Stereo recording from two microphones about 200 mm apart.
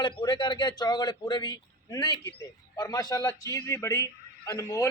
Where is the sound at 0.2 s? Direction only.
25° left (ahead or behind).